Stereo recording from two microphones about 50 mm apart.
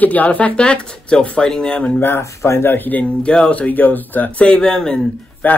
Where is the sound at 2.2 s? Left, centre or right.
Left.